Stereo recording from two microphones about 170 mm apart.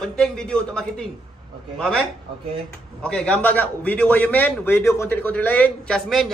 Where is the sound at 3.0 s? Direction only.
5° left (ahead or behind).